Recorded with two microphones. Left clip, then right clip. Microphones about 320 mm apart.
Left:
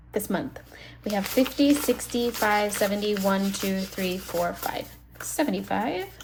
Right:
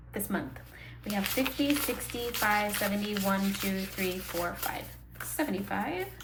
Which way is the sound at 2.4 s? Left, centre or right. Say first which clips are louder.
Left 4 dB; centre.